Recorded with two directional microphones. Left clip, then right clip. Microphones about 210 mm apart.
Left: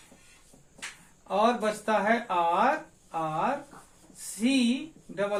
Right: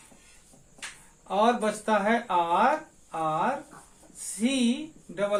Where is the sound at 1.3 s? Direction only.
20° right (ahead or behind).